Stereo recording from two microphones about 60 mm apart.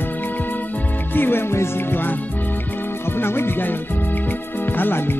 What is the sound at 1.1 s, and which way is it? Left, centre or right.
Speech, left.